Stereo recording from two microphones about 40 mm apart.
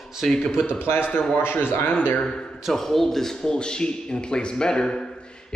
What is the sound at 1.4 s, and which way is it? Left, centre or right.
Speech, left.